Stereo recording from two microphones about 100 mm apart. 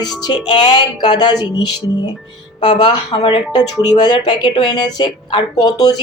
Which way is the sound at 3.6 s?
45° left (ahead or behind).